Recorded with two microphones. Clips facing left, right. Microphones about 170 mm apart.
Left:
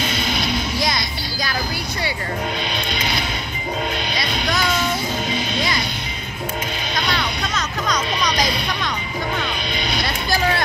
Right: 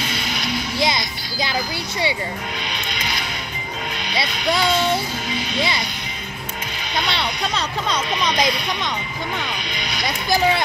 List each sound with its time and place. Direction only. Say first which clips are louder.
0.7 s music: right 1 dB; 25° right (ahead or behind)
7.1 s a sound: even; 30° right (ahead or behind)
9.8 s music: left 5 dB; 30° left (ahead or behind)
10.0 s speech: right 4 dB; 20° right (ahead or behind)